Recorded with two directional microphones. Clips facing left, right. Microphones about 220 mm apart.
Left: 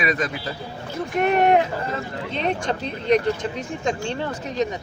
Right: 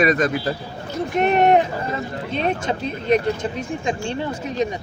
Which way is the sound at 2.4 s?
5° right (ahead or behind).